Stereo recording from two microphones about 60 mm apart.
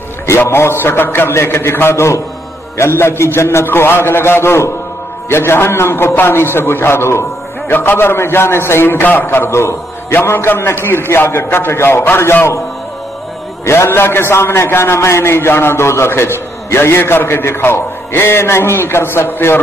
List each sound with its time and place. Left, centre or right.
0.4 s a man's voice: left
7.7 s a man's voice: left
9.0 s a man's voice: left
13.7 s a man's voice: left